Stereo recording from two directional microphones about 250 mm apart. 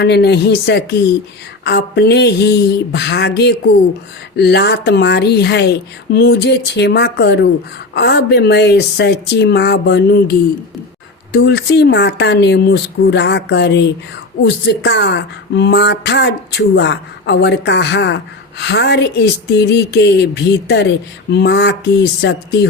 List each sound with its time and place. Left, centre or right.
0.0 s a woman's voice: left